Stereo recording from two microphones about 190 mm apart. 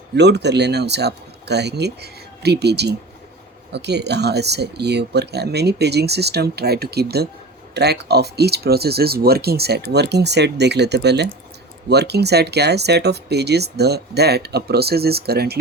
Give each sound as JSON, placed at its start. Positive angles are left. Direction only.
{"t": 0.2, "sound": "speech", "side_deg": -65}